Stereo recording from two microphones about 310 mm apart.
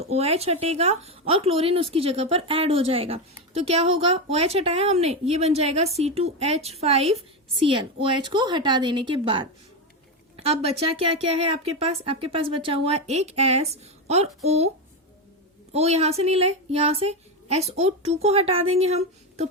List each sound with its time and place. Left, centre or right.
0.0 s a woman's voice: centre
15.7 s speech: centre